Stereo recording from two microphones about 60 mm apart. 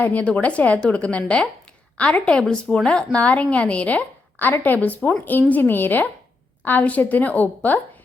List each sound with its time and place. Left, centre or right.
0.0 s a woman's voice: left